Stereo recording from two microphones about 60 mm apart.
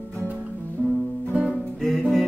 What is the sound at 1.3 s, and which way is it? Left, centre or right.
Music, right.